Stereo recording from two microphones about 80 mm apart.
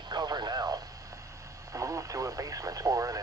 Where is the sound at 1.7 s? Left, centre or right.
Right.